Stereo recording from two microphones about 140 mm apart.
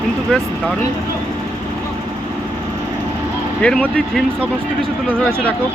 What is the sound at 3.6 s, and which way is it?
Speech, 10° left (ahead or behind).